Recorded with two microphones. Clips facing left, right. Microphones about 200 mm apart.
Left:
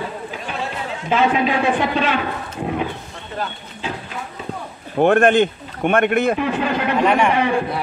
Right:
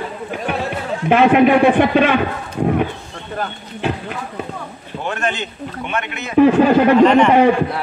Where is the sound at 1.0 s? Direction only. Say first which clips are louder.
Right 6 dB; 60° right (ahead or behind).